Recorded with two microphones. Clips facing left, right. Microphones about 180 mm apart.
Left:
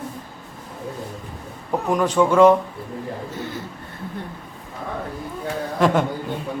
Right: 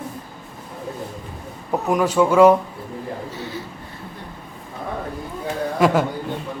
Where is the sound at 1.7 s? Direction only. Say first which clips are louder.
Right 1 dB; 10° right (ahead or behind).